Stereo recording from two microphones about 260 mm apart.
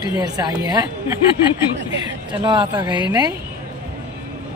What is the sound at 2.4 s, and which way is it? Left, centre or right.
Speech, centre.